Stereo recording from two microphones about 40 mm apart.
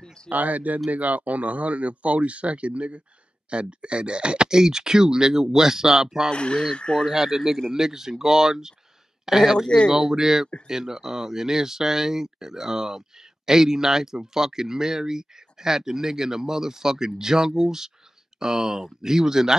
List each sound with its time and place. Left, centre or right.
0.0 s a sound: centre
0.3 s speech: right; by 6.3 s centre
6.3 s speech: left
7.1 s speech: centre